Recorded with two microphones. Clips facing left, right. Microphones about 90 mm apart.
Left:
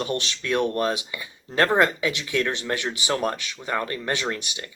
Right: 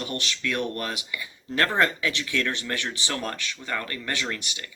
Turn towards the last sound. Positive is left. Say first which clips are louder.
# left 3 dB
turn(degrees=25)  # may be behind; listen again after turning